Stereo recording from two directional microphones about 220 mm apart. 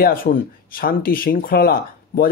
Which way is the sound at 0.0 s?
40° left (ahead or behind).